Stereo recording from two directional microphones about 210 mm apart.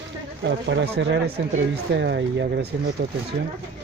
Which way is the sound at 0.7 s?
55° right (ahead or behind).